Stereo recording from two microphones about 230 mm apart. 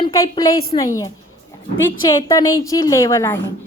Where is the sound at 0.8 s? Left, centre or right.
Centre.